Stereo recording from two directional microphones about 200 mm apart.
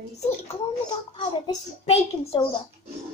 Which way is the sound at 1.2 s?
25° left (ahead or behind).